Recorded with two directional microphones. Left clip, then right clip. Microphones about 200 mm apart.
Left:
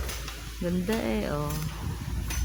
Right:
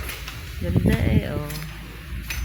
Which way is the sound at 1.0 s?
5° left (ahead or behind).